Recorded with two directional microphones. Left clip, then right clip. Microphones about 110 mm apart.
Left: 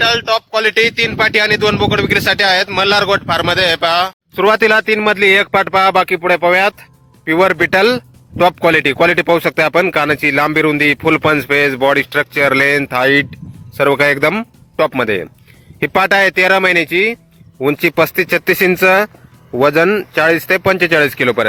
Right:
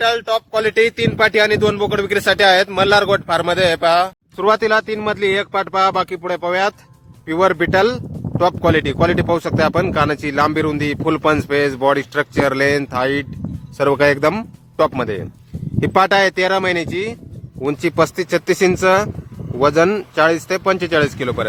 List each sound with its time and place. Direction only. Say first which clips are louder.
0.0 s speech: left 3 dB; 5° left (ahead or behind)
4.4 s speech: left 4 dB; 50° left (ahead or behind)